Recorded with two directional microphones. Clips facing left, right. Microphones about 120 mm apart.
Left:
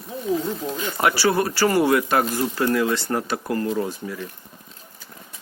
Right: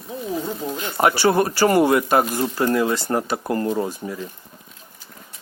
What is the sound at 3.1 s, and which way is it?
Speech, 30° right (ahead or behind).